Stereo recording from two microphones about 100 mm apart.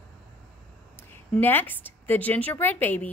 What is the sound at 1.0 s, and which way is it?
A woman's voice, 20° left (ahead or behind).